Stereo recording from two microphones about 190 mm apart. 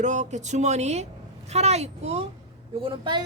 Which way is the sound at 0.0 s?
40° right (ahead or behind).